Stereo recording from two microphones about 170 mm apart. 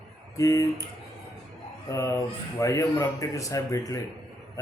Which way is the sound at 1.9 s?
15° left (ahead or behind).